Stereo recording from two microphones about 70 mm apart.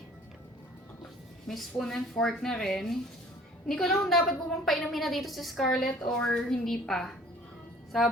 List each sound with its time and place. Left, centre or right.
1.5 s a woman's voice: centre